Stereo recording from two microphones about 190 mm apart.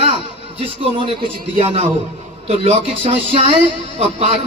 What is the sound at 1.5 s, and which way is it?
Speech, 30° right (ahead or behind).